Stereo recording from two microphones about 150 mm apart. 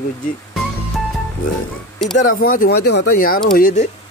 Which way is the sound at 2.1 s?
65° left (ahead or behind).